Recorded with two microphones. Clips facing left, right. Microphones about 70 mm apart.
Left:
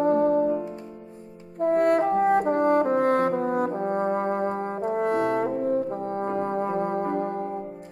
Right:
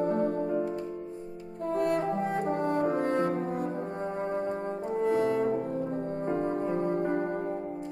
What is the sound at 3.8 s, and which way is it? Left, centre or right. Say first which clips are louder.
Brass instrument: left 8 dB; left.